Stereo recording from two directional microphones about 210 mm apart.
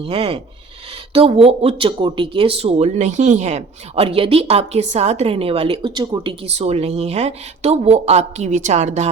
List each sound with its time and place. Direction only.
0.0 s speech: 25° right (ahead or behind)